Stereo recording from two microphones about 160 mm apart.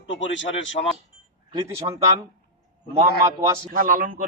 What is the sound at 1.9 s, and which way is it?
Speech, 30° right (ahead or behind).